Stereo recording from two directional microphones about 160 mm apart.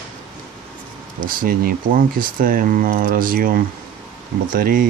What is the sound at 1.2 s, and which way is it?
Speech, 60° right (ahead or behind).